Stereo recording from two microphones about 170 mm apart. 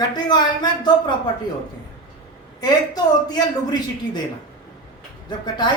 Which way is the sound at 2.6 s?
25° left (ahead or behind).